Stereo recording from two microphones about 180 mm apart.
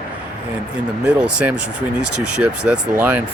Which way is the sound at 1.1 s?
5° right (ahead or behind).